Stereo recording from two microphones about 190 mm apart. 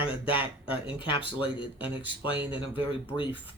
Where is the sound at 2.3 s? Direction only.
10° right (ahead or behind).